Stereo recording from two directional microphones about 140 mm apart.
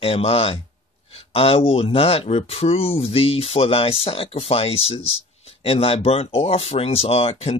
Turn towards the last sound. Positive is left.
turn(degrees=45)  # may be behind; listen again after turning